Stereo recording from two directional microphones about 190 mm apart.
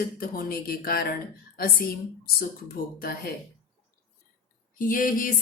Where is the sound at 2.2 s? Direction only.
50° left (ahead or behind).